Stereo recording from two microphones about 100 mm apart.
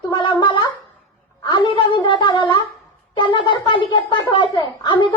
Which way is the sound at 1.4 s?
50° left (ahead or behind).